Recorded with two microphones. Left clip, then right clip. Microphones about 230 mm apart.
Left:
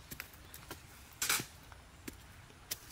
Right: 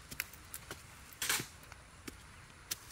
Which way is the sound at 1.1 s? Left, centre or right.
Centre.